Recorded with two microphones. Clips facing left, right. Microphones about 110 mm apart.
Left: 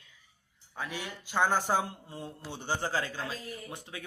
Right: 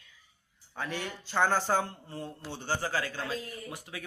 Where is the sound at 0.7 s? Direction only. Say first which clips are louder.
Right 2 dB; 10° left (ahead or behind).